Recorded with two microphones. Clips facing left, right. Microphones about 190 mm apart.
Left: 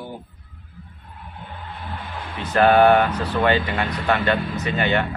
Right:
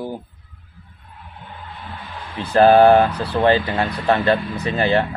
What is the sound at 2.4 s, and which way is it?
Speech, 30° right (ahead or behind).